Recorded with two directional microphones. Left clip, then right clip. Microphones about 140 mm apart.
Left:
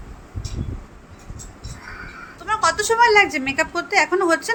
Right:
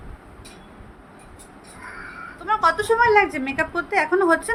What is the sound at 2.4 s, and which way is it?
A woman's voice, 5° left (ahead or behind).